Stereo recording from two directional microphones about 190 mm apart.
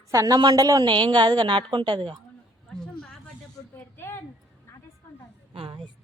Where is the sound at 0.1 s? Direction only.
20° right (ahead or behind).